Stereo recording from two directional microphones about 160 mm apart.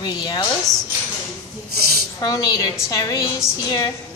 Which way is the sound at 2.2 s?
25° left (ahead or behind).